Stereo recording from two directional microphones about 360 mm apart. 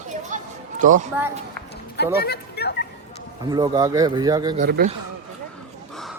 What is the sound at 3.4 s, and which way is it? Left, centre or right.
Speech, centre.